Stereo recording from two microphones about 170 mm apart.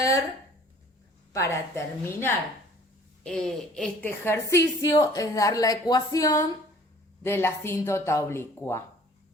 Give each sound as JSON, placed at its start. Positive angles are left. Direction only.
{"t": 0.0, "sound": "a sound", "side_deg": 20}
{"t": 1.3, "sound": "speech", "side_deg": 15}
{"t": 3.2, "sound": "speech", "side_deg": 5}
{"t": 4.2, "sound": "a woman's voice", "side_deg": 15}